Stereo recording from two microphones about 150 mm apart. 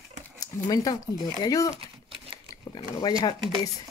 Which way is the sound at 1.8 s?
35° right (ahead or behind).